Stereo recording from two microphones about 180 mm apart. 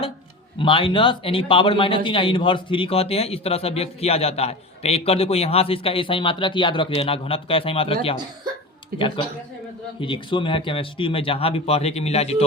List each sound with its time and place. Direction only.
0.6 s a man's voice: 30° left (ahead or behind)